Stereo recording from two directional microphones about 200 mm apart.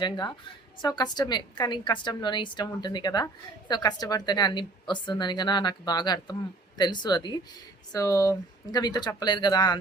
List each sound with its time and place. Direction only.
0.0 s a woman's voice: 20° left (ahead or behind)